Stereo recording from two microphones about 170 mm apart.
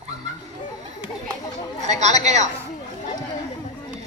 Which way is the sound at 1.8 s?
40° right (ahead or behind).